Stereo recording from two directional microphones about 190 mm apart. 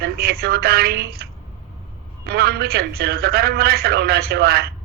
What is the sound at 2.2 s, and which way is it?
A man's voice, 55° right (ahead or behind).